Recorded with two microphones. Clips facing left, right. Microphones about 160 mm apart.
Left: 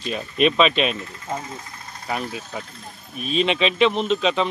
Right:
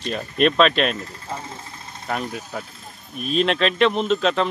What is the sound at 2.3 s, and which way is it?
Speech, centre (ahead or behind).